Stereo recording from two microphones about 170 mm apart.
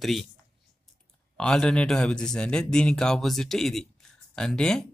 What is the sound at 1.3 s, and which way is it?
Speech, 5° left (ahead or behind).